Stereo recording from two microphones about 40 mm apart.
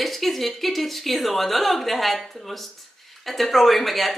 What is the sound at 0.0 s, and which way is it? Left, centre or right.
Speech, centre.